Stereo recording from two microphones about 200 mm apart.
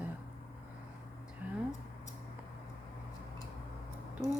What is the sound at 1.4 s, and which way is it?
Speech, 10° right (ahead or behind).